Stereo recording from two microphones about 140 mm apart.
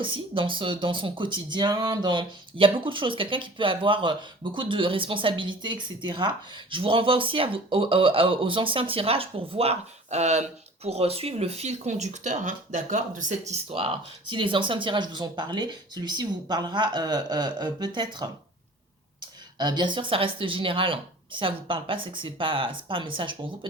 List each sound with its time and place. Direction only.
0.0 s speech: 40° right (ahead or behind)
19.5 s speech: 30° right (ahead or behind)